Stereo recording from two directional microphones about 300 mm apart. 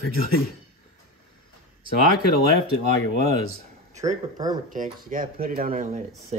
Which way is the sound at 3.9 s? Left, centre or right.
Right.